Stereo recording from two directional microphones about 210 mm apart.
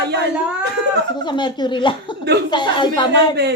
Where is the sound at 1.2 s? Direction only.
20° left (ahead or behind).